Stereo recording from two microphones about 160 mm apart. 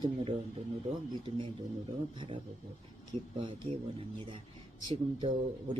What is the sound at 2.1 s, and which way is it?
Speech, 30° right (ahead or behind).